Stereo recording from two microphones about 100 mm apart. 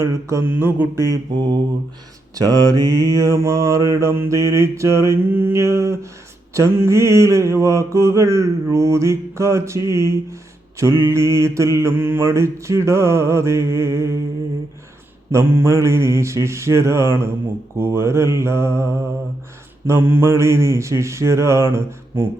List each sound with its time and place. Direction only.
0.0 s mantra: 30° right (ahead or behind)
0.5 s mantra: 20° right (ahead or behind)
2.3 s mantra: 40° right (ahead or behind)
15.3 s mantra: 25° right (ahead or behind)
19.9 s mantra: 20° right (ahead or behind)